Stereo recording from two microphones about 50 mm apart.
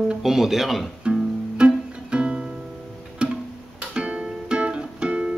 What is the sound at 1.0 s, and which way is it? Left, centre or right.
Music, centre.